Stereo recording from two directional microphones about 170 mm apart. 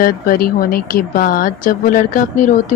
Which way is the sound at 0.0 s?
55° left (ahead or behind).